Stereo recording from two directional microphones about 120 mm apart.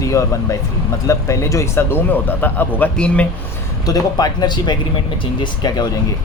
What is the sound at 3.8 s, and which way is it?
Speech, 30° left (ahead or behind).